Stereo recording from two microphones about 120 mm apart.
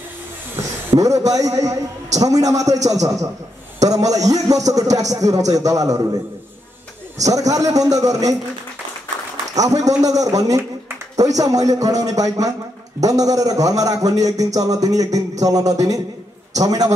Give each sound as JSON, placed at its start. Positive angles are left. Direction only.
{"t": 0.8, "sound": "a man's voice", "side_deg": -30}
{"t": 7.2, "sound": "a man's voice", "side_deg": -30}
{"t": 9.6, "sound": "a man's voice", "side_deg": -30}